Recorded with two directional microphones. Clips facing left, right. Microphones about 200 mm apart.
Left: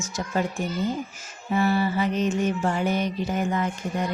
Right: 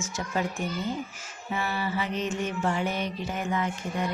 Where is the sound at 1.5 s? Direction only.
40° left (ahead or behind).